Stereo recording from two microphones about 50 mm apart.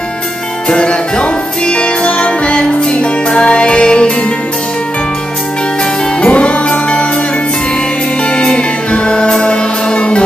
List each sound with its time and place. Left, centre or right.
0.7 s music: centre
6.2 s music: left
8.2 s music: left